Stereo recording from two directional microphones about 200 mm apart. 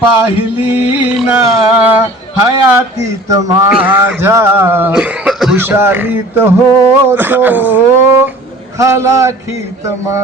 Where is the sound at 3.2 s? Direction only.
15° right (ahead or behind).